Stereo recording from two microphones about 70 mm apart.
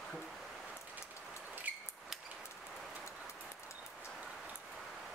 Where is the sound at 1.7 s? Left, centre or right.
Right.